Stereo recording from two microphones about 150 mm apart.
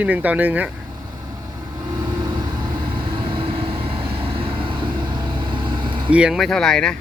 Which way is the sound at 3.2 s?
35° right (ahead or behind).